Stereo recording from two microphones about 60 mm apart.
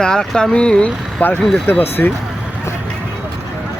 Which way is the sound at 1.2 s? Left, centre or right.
Left.